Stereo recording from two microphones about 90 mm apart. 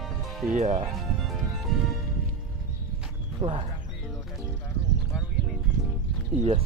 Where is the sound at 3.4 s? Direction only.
75° right (ahead or behind).